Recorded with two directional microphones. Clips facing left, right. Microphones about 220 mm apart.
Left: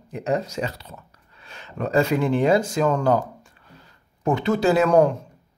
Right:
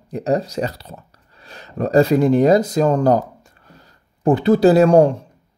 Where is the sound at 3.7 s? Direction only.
35° right (ahead or behind).